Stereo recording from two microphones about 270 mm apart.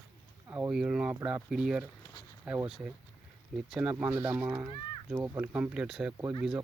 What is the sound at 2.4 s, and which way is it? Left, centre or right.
Speech, centre.